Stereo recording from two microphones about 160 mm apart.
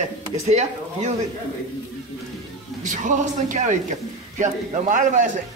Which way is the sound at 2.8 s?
50° right (ahead or behind).